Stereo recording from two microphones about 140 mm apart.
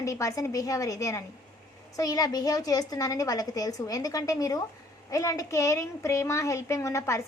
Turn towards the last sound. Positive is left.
turn(degrees=20)  # may be behind; listen again after turning